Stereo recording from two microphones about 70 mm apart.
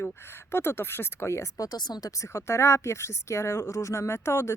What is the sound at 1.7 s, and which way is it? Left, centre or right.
A woman's voice, left.